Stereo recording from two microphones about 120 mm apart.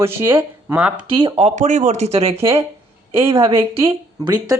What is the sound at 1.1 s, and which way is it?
Speech, 55° right (ahead or behind).